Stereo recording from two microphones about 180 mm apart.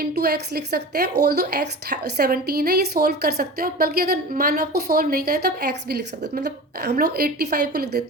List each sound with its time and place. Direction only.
0.0 s a woman's voice: 60° right (ahead or behind)